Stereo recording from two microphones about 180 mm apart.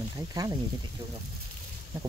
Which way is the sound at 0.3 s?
20° right (ahead or behind).